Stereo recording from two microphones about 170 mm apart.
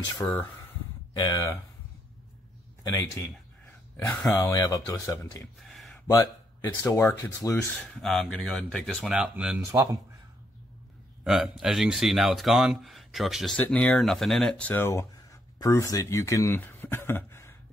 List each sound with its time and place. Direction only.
0.2 s speech: 15° left (ahead or behind)
2.8 s speech: 20° left (ahead or behind)
7.7 s speech: centre (ahead or behind)
11.2 s speech: centre (ahead or behind)